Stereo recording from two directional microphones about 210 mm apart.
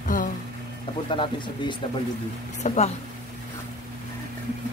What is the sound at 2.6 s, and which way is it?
Speech, 35° left (ahead or behind).